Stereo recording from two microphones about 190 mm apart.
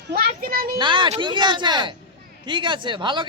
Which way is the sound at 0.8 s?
25° right (ahead or behind).